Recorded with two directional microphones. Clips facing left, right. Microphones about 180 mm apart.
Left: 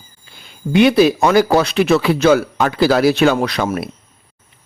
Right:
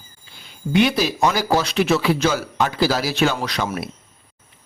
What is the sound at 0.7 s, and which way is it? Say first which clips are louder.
Speech: left 7 dB; 55° left (ahead or behind).